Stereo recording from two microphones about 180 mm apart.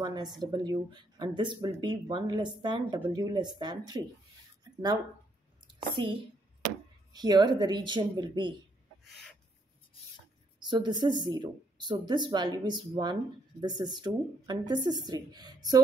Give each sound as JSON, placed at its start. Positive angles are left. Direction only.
{"t": 0.0, "sound": "speech", "side_deg": -20}
{"t": 5.7, "sound": "a woman's voice", "side_deg": -25}
{"t": 9.0, "sound": "a sound", "side_deg": 5}
{"t": 10.6, "sound": "speech", "side_deg": -25}